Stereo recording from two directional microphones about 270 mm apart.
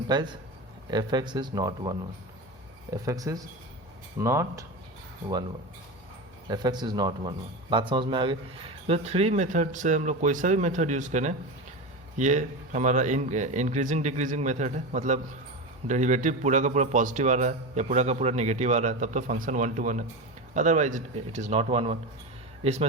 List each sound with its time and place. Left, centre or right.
0.1 s speech: centre
6.5 s a man's voice: centre